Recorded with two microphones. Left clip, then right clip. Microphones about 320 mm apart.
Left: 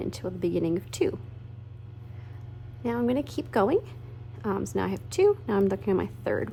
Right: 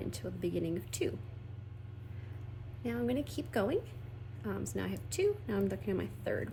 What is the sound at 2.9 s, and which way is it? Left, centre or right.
A woman's voice, centre.